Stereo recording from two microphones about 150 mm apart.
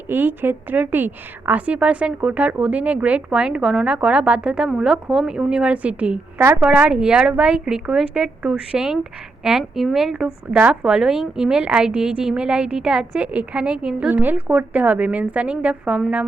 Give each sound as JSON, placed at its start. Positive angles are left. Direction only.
{"t": 0.1, "sound": "a woman's voice", "side_deg": -15}